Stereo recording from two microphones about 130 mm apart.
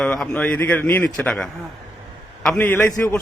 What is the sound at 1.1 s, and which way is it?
Speech, 5° left (ahead or behind).